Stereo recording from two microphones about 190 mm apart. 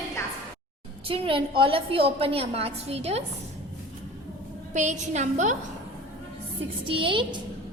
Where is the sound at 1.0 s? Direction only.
30° right (ahead or behind).